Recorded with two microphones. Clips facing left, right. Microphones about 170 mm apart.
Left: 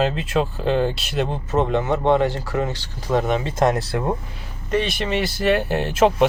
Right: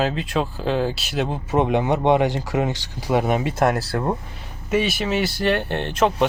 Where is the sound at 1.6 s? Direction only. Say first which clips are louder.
Right 1 dB; 15° right (ahead or behind).